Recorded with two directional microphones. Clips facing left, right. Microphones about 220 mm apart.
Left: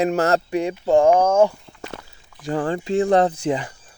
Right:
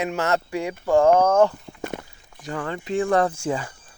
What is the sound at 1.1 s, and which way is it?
Speech, 10° left (ahead or behind).